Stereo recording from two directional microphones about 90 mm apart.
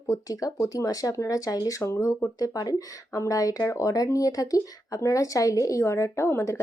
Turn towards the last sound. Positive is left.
turn(degrees=30)  # may be behind; listen again after turning